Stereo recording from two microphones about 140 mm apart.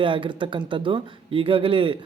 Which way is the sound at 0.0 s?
35° right (ahead or behind).